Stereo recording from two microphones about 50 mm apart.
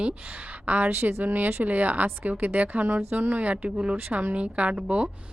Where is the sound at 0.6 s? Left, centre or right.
Right.